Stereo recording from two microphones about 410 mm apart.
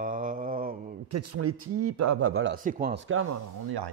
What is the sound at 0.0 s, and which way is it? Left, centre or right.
Mantra, centre.